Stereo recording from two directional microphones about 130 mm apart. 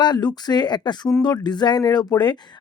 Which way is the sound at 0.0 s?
35° left (ahead or behind).